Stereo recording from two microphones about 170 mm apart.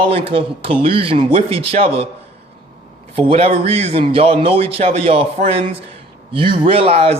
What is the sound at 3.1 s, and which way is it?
Speech, 35° right (ahead or behind).